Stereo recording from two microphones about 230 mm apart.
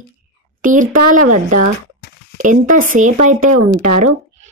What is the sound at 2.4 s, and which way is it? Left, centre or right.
Speech, right.